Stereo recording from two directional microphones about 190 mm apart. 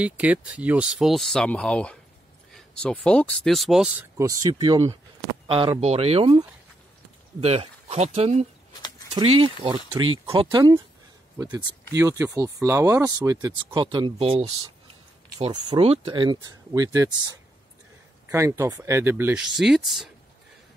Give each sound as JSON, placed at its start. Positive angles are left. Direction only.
{"t": 0.0, "sound": "speech", "side_deg": -5}
{"t": 4.2, "sound": "speech", "side_deg": -20}